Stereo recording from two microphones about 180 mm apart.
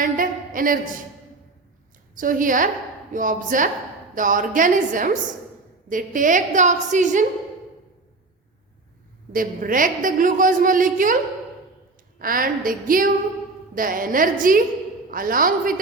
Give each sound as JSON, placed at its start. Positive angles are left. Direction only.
{"t": 0.0, "sound": "a sound", "side_deg": -50}
{"t": 2.1, "sound": "a woman's voice", "side_deg": -50}
{"t": 9.3, "sound": "a woman's voice", "side_deg": -50}
{"t": 12.2, "sound": "a woman's voice", "side_deg": -50}